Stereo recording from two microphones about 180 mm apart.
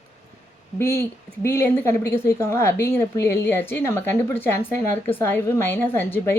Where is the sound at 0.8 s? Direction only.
15° left (ahead or behind).